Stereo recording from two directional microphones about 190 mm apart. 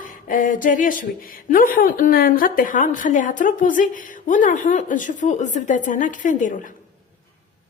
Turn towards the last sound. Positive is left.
turn(degrees=40)  # may be behind; listen again after turning